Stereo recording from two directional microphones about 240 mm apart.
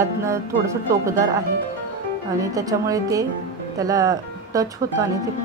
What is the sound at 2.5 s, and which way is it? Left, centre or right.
A woman's voice, centre.